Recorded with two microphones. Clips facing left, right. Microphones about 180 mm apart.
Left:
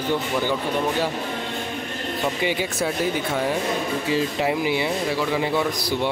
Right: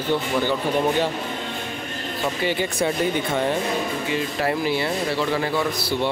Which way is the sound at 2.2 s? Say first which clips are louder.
Right 1 dB; 10° left (ahead or behind).